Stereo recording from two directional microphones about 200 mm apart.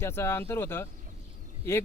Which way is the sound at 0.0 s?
15° left (ahead or behind).